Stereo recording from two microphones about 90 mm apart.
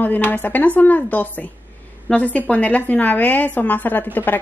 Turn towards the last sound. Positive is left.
turn(degrees=20)  # may be behind; listen again after turning